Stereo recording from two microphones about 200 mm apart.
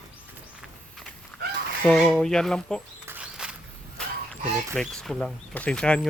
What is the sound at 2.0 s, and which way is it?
Speech, centre (ahead or behind).